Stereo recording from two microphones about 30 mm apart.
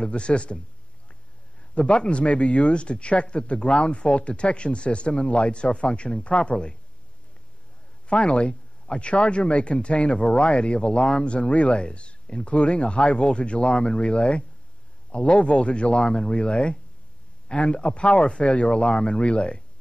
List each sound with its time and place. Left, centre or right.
0.0 s a man's voice: left
1.8 s a man's voice: left
8.1 s a man's voice: left
16.1 s speech: left
16.3 s a man's voice: left